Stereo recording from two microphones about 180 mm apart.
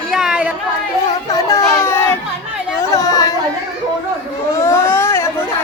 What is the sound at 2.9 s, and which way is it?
Chatter, 20° left (ahead or behind).